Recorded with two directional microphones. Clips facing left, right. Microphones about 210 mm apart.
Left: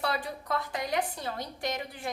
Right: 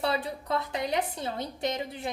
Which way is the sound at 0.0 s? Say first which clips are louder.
Right 3 dB; 25° right (ahead or behind).